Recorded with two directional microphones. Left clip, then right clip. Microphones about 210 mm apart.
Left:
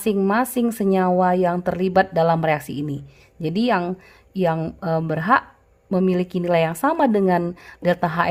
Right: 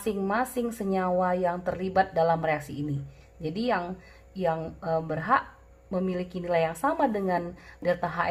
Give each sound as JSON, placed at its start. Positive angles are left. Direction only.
{"t": 0.0, "sound": "speech", "side_deg": 55}